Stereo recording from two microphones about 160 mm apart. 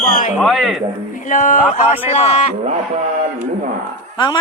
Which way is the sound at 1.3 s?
55° left (ahead or behind).